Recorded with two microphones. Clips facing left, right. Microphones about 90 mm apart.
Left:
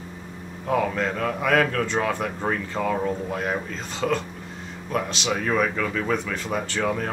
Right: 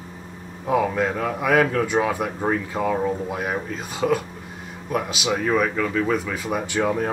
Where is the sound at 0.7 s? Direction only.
10° right (ahead or behind).